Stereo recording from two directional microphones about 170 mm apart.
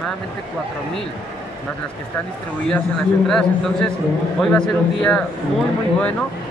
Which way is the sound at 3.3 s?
5° left (ahead or behind).